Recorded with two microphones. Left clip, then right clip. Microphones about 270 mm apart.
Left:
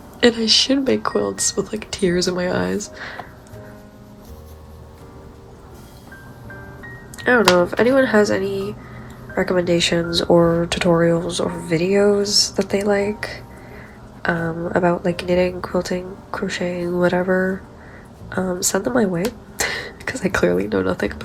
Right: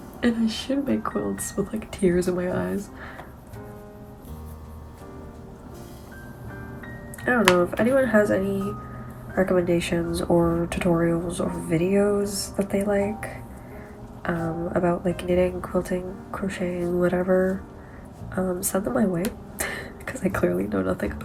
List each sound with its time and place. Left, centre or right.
0.2 s speech: left
7.3 s speech: left